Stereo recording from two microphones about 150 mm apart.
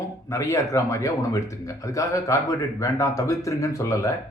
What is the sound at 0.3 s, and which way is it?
Speech, 20° left (ahead or behind).